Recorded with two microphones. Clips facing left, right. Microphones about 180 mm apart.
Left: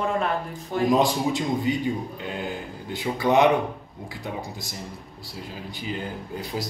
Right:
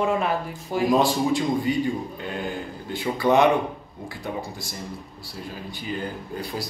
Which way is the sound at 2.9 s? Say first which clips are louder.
Right 1 dB; 20° left (ahead or behind).